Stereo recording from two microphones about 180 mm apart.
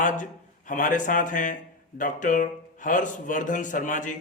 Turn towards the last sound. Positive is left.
turn(degrees=45)  # may be behind; listen again after turning